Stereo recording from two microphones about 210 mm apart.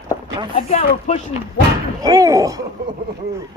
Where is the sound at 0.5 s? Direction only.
35° left (ahead or behind).